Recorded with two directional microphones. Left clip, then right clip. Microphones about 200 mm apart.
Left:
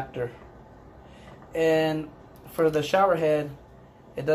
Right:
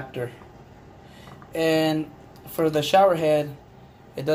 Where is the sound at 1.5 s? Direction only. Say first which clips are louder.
Right 1 dB; 15° right (ahead or behind).